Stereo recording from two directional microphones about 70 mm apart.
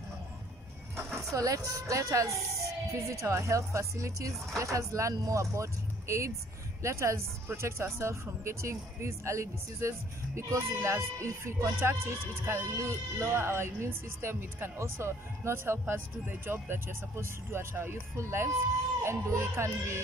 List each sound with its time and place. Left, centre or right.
1.3 s speech: right